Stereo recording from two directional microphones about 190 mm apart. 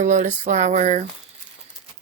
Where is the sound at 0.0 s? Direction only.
40° right (ahead or behind).